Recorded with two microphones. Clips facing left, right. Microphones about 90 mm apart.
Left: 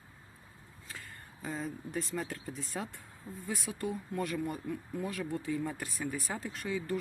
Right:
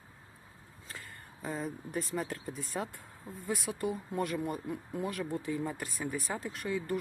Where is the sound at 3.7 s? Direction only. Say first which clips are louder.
Right 3 dB; 30° right (ahead or behind).